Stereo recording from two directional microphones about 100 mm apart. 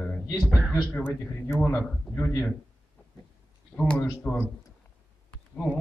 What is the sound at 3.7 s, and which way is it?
Speech, 10° left (ahead or behind).